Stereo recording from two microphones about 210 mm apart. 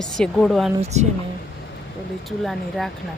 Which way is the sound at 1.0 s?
35° right (ahead or behind).